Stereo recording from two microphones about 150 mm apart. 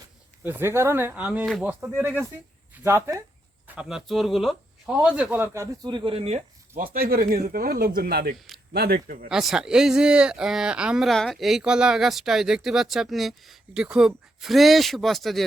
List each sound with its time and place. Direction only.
0.4 s speech: 15° right (ahead or behind)
3.8 s speech: 5° right (ahead or behind)
5.8 s speech: 30° right (ahead or behind)
6.8 s speech: 80° right; by 9.3 s 65° right (ahead or behind)
9.3 s speech: 5° right (ahead or behind)